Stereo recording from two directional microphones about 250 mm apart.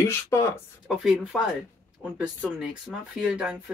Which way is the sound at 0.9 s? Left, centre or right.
Centre.